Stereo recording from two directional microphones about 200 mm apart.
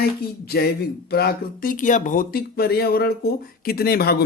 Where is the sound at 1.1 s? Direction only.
50° left (ahead or behind).